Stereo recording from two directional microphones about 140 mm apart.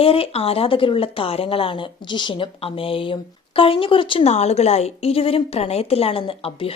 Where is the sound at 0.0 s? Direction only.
40° left (ahead or behind).